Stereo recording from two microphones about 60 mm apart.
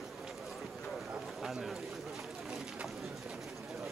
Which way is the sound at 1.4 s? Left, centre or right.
Centre.